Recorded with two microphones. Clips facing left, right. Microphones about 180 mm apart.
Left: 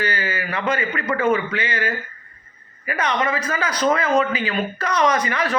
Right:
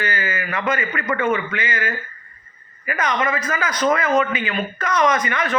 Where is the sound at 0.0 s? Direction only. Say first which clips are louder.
Even; 35° left (ahead or behind).